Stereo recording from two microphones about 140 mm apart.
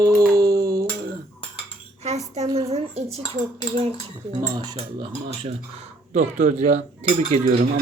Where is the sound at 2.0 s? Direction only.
50° right (ahead or behind).